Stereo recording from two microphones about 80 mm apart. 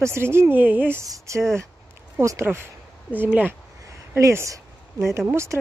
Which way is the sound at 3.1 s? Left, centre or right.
Right.